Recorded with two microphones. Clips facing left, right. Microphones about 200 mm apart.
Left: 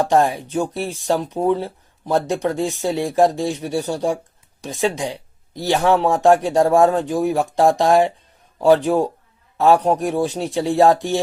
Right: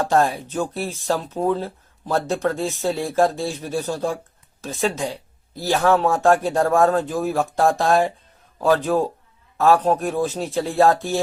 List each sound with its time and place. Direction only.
0.0 s speech: 15° left (ahead or behind)